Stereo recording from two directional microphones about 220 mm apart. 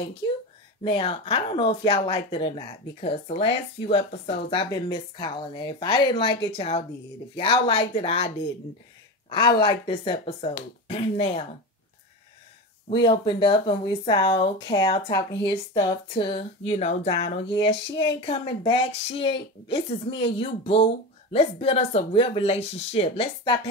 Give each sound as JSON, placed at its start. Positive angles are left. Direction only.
{"t": 0.2, "sound": "speech", "side_deg": 20}
{"t": 9.3, "sound": "speech", "side_deg": 20}
{"t": 12.9, "sound": "speech", "side_deg": 20}